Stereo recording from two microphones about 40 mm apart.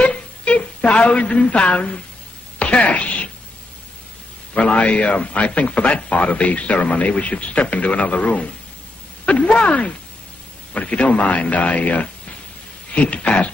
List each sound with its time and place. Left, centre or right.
0.0 s a sound: left
0.7 s a man's voice: left
4.6 s a man's voice: left